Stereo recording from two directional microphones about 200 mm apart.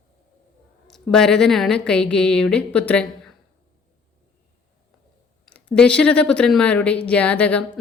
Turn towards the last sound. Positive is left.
turn(degrees=5)  # may be behind; listen again after turning